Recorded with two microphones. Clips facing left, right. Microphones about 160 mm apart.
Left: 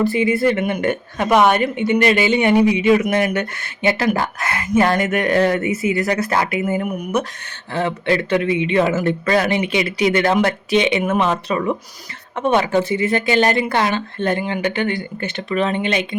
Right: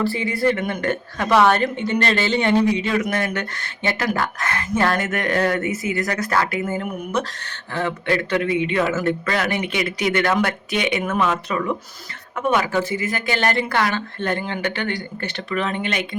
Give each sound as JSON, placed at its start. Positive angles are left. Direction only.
{"t": 0.0, "sound": "a woman's voice", "side_deg": 20}